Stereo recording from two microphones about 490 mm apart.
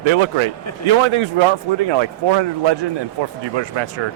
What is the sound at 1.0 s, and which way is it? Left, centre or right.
A man's voice, right.